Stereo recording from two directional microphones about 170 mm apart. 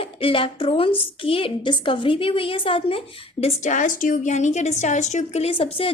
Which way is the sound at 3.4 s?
45° left (ahead or behind).